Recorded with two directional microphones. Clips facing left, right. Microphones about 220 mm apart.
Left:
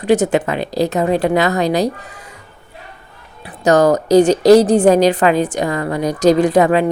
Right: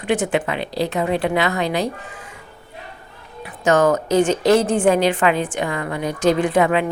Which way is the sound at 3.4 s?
35° left (ahead or behind).